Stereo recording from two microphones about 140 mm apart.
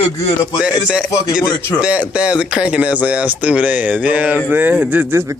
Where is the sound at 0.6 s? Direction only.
5° right (ahead or behind).